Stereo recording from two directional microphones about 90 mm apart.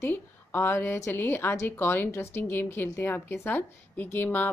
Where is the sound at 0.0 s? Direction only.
25° left (ahead or behind).